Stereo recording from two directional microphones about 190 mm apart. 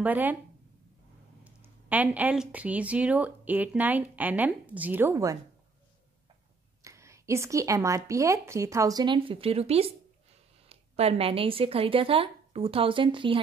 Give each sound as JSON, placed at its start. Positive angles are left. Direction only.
{"t": 0.0, "sound": "speech", "side_deg": -10}
{"t": 1.4, "sound": "speech", "side_deg": -10}
{"t": 6.8, "sound": "speech", "side_deg": -15}